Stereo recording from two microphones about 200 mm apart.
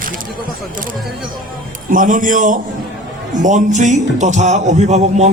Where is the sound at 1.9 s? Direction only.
40° right (ahead or behind).